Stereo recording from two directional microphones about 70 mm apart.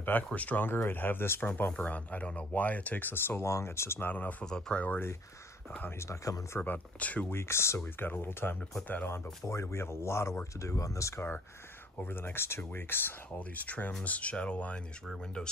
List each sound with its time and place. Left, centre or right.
0.0 s speech: left
1.7 s speech: centre; by 4.1 s left
4.1 s speech: left
4.5 s speech: centre
5.8 s speech: left
6.6 s speech: left
7.2 s speech: left
7.8 s speech: left
11.1 s speech: left
13.4 s speech: left